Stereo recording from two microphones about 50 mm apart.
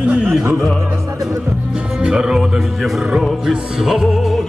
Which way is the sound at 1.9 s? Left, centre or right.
Centre.